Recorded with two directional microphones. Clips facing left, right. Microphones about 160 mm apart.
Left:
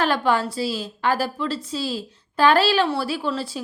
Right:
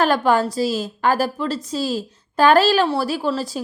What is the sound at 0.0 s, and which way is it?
A woman's voice, 45° right (ahead or behind).